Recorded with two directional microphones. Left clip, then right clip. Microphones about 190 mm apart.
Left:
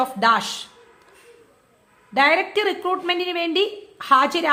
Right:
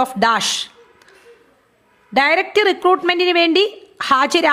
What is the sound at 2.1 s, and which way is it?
A woman's voice, 40° right (ahead or behind).